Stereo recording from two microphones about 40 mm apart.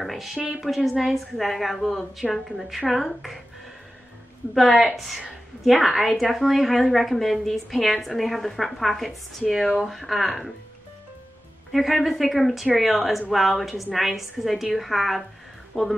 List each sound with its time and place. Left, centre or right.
0.0 s a sound: centre
0.5 s a woman's voice: centre
4.6 s a woman's voice: centre
11.7 s a woman's voice: centre
15.7 s speech: left